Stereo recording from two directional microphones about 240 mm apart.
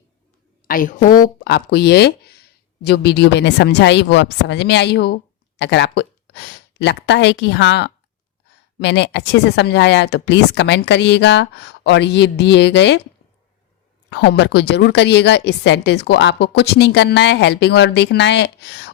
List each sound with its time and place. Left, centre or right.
0.7 s a woman's voice: left
14.1 s a woman's voice: left